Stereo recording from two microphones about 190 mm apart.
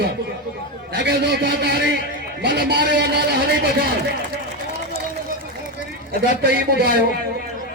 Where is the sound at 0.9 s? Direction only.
60° right (ahead or behind).